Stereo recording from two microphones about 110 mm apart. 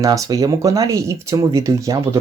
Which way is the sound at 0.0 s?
30° right (ahead or behind).